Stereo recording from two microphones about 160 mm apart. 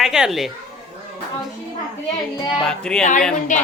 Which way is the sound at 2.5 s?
5° left (ahead or behind).